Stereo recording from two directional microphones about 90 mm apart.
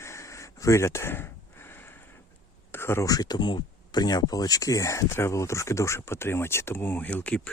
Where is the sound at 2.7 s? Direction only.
25° left (ahead or behind).